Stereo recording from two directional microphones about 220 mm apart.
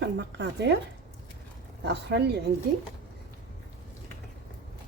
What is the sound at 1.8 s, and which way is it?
Speech, 50° right (ahead or behind).